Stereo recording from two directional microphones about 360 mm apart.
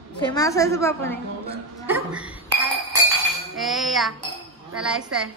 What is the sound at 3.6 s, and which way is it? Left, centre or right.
A woman's voice, centre.